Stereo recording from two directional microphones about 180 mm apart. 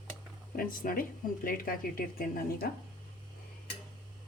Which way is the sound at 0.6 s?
50° left (ahead or behind).